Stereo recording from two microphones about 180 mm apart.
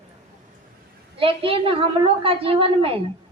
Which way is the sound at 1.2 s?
30° right (ahead or behind).